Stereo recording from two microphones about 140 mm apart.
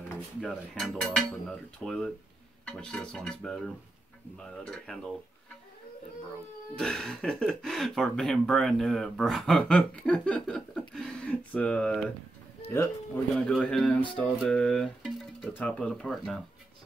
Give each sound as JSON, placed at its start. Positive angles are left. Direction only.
{"t": 0.4, "sound": "speech", "side_deg": 5}
{"t": 6.7, "sound": "a man's voice", "side_deg": 5}
{"t": 13.3, "sound": "a man's voice", "side_deg": 5}